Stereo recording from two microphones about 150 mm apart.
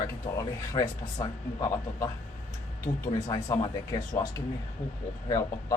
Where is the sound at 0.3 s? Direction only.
20° left (ahead or behind).